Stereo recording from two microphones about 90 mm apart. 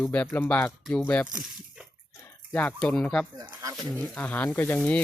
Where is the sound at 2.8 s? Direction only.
10° left (ahead or behind).